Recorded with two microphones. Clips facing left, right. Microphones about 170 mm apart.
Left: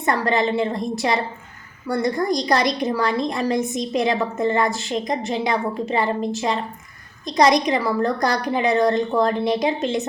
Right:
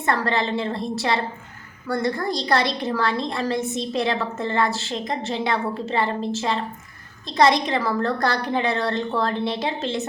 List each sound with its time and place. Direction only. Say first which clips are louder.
0.0 s a woman's voice: left 3 dB; 15° left (ahead or behind)